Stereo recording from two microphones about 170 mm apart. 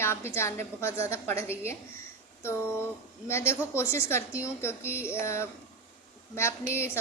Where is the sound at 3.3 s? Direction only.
15° left (ahead or behind).